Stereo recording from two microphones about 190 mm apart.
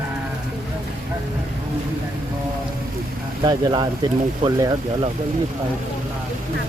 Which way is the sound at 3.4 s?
20° right (ahead or behind).